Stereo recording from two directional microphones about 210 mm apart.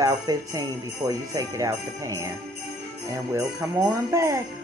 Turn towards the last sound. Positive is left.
turn(degrees=-15)  # may be behind; listen again after turning